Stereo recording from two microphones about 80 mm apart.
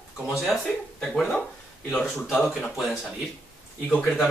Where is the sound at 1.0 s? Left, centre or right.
Centre.